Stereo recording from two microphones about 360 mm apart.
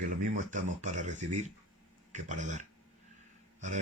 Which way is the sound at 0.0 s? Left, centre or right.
Right.